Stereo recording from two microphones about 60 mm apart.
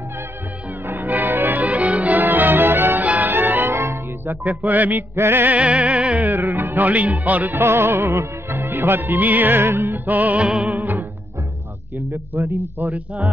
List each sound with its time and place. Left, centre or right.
0.8 s music: right
3.0 s music: right
3.3 s music: right
4.6 s music: right
5.1 s music: right
5.5 s music: right
7.6 s music: right
10.0 s music: right
12.4 s music: right
12.8 s music: right